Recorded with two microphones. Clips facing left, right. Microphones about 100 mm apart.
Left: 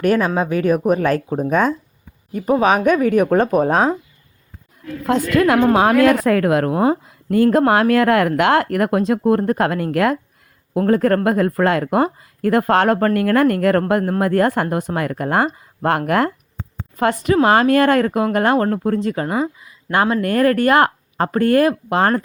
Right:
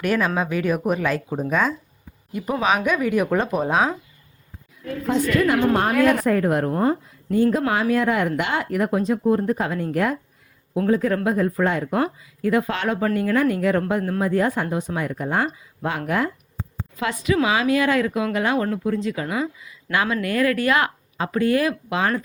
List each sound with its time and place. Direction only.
0.0 s speech: 35° left (ahead or behind)
5.0 s a woman's voice: 75° left (ahead or behind)
10.8 s speech: 60° left (ahead or behind)
17.0 s speech: 50° left (ahead or behind)